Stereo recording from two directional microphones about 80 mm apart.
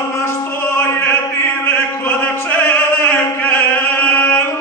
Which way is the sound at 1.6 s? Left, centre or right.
Left.